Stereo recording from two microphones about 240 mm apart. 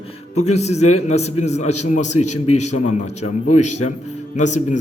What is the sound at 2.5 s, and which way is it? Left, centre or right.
Speech, left.